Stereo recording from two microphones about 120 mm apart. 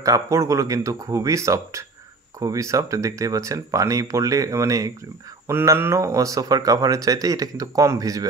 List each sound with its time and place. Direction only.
0.0 s speech: 25° right (ahead or behind)